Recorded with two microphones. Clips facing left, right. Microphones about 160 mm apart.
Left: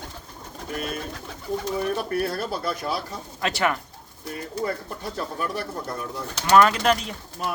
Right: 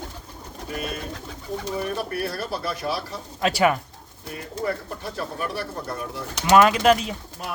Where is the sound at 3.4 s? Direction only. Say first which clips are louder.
Right 4 dB; 10° right (ahead or behind).